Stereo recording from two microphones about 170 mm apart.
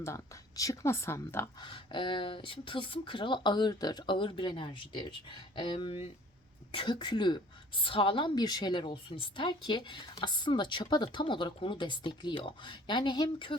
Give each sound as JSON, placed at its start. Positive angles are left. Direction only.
{"t": 0.0, "sound": "a woman's voice", "side_deg": 20}
{"t": 1.6, "sound": "a woman's voice", "side_deg": 30}